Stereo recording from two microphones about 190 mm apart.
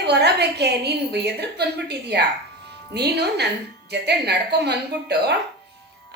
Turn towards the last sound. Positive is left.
turn(degrees=-60)  # may be behind; listen again after turning